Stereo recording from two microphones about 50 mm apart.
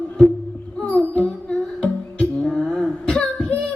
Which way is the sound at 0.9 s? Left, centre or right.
Left.